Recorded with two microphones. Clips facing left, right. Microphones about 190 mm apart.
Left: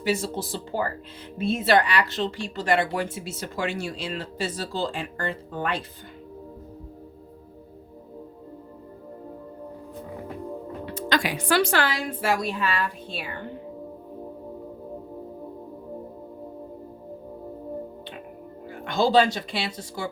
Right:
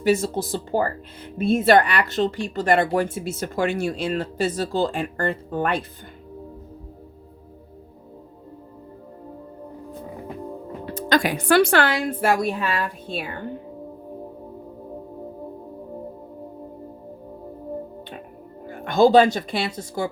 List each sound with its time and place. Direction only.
0.0 s speech: 45° right (ahead or behind)
10.8 s speech: 45° right (ahead or behind)
18.7 s speech: 50° right (ahead or behind)